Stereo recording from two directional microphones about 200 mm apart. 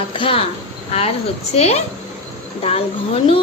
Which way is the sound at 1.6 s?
30° left (ahead or behind).